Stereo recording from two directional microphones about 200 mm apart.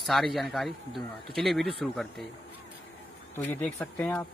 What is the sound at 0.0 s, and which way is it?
Speech, centre (ahead or behind).